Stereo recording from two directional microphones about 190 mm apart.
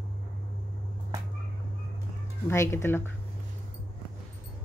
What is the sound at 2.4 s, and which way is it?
Speech, 15° left (ahead or behind).